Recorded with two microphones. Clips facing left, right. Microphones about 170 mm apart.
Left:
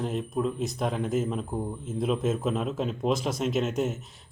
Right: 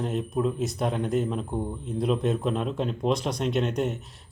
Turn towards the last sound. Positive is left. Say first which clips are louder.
# right 1 dB
turn(degrees=0)  # may be behind; listen again after turning